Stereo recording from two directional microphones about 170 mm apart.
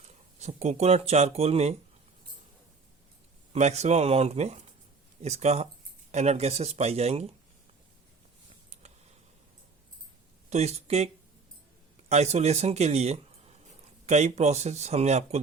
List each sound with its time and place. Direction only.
0.0 s speech: 40° right (ahead or behind)
3.5 s speech: 40° right (ahead or behind)
10.5 s speech: 40° right (ahead or behind)